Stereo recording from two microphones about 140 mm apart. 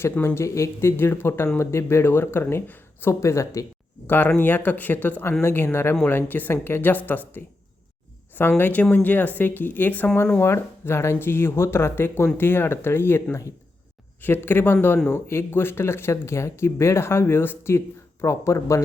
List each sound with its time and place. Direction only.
0.0 s speech: 15° left (ahead or behind)
10.4 s speech: 20° left (ahead or behind)